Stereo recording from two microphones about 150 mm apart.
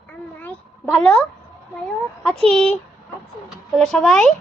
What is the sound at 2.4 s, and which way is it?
Speech, 5° left (ahead or behind).